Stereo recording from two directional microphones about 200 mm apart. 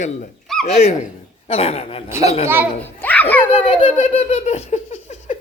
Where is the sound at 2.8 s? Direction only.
10° left (ahead or behind).